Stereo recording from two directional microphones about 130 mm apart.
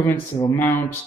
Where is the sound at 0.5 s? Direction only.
15° left (ahead or behind).